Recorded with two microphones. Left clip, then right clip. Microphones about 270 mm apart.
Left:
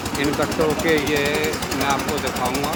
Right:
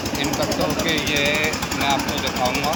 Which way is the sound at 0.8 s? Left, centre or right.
Centre.